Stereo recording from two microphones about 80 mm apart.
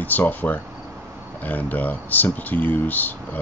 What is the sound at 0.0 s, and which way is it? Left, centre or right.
Speech, left.